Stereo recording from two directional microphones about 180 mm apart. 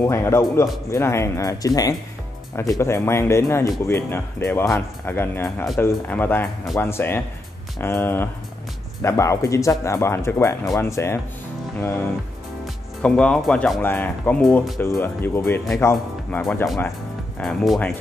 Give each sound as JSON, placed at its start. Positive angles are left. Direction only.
{"t": 0.0, "sound": "speech", "side_deg": 15}
{"t": 13.0, "sound": "speech", "side_deg": 5}
{"t": 14.4, "sound": "speech", "side_deg": 0}
{"t": 14.8, "sound": "speech", "side_deg": 10}
{"t": 16.3, "sound": "speech", "side_deg": 5}